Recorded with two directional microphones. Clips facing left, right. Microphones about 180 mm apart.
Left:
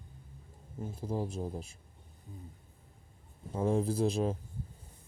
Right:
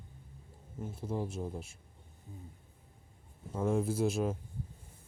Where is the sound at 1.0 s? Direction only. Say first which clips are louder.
Left 1 dB; 35° left (ahead or behind).